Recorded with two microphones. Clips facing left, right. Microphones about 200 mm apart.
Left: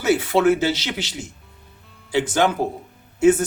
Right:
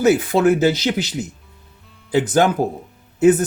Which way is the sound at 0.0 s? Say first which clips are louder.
Right 3 dB; 45° right (ahead or behind).